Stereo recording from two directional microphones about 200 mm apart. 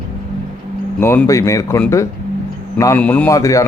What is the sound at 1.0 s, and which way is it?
Speech, 10° left (ahead or behind).